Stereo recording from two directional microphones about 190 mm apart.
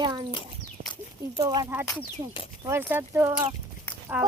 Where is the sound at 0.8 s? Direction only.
50° right (ahead or behind).